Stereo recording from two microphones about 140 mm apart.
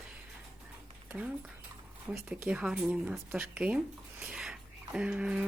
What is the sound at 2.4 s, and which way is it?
Speech, 5° right (ahead or behind).